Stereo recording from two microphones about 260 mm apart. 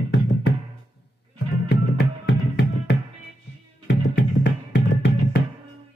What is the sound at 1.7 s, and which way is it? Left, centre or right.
Music, left.